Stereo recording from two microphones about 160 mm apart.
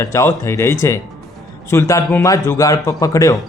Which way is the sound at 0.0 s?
20° left (ahead or behind).